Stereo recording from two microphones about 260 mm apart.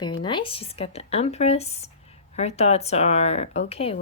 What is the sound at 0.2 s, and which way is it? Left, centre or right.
Speech, centre.